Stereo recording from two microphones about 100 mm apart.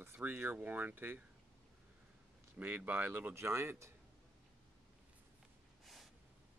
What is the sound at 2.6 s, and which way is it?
Speech, 15° right (ahead or behind).